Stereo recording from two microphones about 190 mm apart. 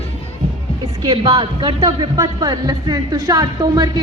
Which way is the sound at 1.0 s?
20° right (ahead or behind).